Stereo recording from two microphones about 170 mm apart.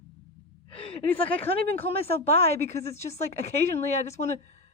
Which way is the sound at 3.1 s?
40° left (ahead or behind).